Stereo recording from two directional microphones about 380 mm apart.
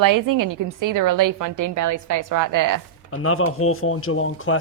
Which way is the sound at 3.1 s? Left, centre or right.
Left.